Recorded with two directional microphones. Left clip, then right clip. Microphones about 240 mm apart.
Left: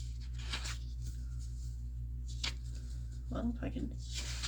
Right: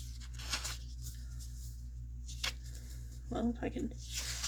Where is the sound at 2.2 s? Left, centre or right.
Centre.